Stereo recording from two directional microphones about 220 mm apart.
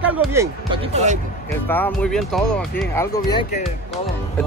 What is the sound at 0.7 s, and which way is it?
Speech, 30° right (ahead or behind).